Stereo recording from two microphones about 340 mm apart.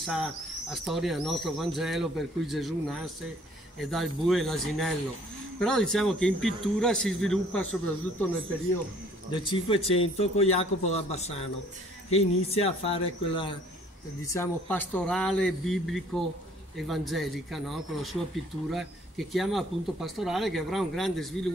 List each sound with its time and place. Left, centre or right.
0.0 s speech: centre
9.3 s a man's voice: centre